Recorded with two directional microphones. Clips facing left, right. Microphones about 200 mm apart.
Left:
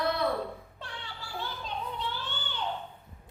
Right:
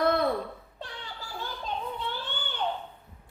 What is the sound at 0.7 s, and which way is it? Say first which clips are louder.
Child singing: right 2 dB; 40° right (ahead or behind).